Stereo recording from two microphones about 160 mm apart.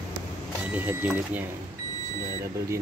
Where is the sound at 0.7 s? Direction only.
10° right (ahead or behind).